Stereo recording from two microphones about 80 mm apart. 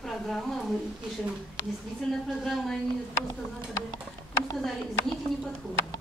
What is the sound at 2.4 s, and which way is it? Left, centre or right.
Speech, centre.